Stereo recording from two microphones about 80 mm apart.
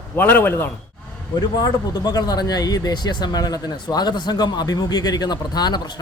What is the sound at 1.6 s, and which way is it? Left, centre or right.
Speech, left.